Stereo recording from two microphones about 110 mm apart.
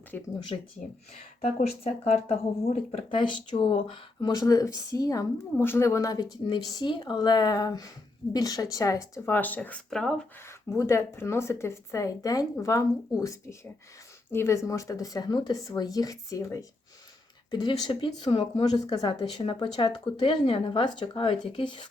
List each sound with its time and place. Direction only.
0.1 s speech: 15° left (ahead or behind)
1.4 s speech: 70° left (ahead or behind)
3.2 s speech: 45° left (ahead or behind); by 6.2 s 30° left (ahead or behind)
6.7 s speech: 45° left (ahead or behind)
9.3 s speech: 15° left (ahead or behind)
10.8 s a woman's voice: 25° left (ahead or behind)
17.5 s speech: 45° left (ahead or behind)
18.6 s speech: 40° left (ahead or behind)